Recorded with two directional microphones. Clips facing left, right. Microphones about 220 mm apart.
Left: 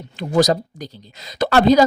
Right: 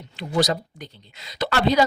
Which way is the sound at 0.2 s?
45° left (ahead or behind).